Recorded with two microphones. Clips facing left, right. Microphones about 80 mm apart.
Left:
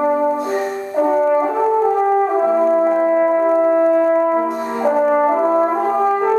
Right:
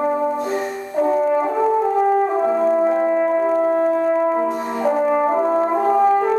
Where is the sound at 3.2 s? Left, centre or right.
Centre.